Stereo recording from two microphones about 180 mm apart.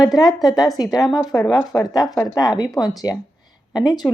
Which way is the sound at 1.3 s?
20° left (ahead or behind).